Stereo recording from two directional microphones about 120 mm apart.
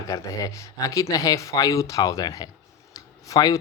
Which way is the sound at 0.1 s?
30° left (ahead or behind).